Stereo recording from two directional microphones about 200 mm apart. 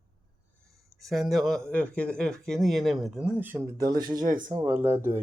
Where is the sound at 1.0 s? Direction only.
Centre (ahead or behind); by 4.7 s 25° right (ahead or behind).